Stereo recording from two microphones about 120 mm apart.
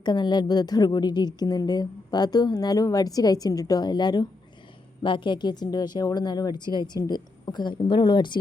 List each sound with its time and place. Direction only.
0.0 s a woman's voice: 40° left (ahead or behind)